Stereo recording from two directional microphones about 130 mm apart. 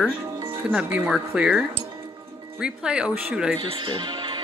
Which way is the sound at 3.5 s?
40° right (ahead or behind).